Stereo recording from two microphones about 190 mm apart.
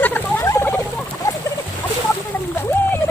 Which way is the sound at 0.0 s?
10° left (ahead or behind).